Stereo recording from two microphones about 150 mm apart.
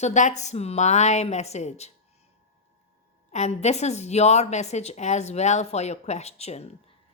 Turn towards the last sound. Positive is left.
turn(degrees=45)  # may be behind; listen again after turning